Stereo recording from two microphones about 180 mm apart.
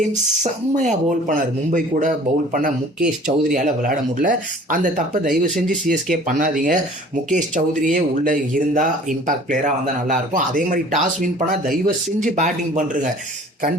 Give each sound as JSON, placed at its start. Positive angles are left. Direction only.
{"t": 0.8, "sound": "speech", "side_deg": -45}